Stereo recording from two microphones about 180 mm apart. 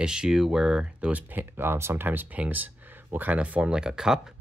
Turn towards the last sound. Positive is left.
turn(degrees=-5)  # may be behind; listen again after turning